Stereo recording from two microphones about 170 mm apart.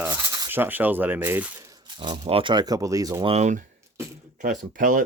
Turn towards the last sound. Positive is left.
turn(degrees=-50)  # may be behind; listen again after turning